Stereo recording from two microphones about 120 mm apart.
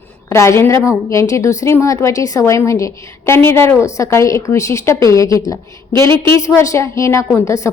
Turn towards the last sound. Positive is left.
turn(degrees=25)  # may be behind; listen again after turning